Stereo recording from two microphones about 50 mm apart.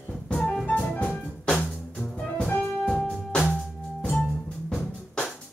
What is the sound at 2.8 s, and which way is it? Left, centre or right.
Music, centre.